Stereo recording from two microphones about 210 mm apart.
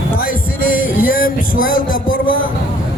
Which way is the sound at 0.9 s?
40° left (ahead or behind).